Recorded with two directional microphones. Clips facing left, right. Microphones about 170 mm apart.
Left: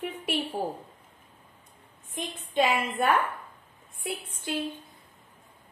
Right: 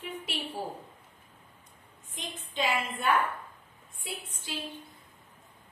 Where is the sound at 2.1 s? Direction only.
55° left (ahead or behind).